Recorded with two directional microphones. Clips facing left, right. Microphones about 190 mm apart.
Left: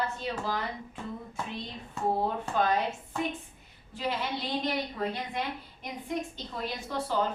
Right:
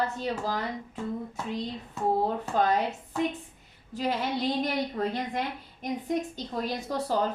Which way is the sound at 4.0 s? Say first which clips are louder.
Right 4 dB; 40° right (ahead or behind).